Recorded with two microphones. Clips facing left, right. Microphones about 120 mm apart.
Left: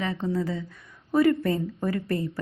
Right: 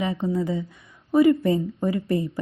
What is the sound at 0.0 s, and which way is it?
A woman's voice, 15° right (ahead or behind).